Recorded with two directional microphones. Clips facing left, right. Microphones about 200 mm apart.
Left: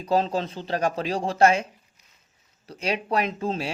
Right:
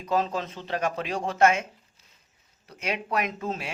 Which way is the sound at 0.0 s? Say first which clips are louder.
Left 3 dB; 30° left (ahead or behind).